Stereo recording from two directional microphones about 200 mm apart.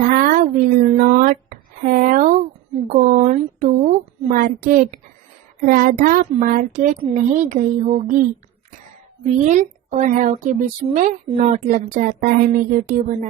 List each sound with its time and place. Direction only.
0.1 s a sound: 40° right (ahead or behind)
5.6 s a woman's voice: 45° right (ahead or behind)
9.2 s a woman's voice: 35° right (ahead or behind)